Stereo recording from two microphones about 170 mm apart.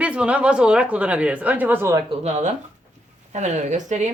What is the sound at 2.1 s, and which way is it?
Speech, 40° right (ahead or behind).